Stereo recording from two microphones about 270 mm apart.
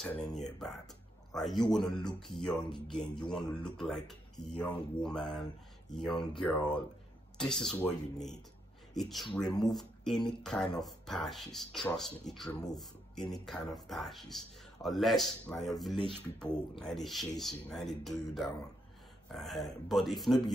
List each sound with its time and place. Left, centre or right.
0.0 s speech: centre